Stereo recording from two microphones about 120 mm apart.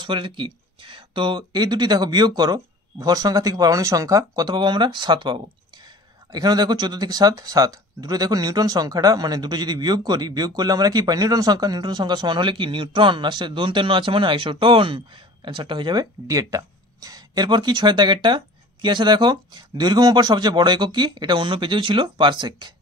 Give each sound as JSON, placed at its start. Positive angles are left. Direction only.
{"t": 0.0, "sound": "speech", "side_deg": -45}